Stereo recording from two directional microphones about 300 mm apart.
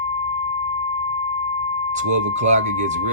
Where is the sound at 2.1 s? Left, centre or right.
Right.